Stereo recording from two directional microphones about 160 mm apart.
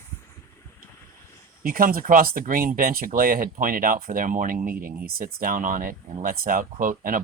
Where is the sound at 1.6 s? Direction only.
65° right (ahead or behind).